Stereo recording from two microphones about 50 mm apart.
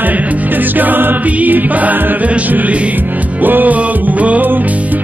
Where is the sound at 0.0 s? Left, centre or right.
Right.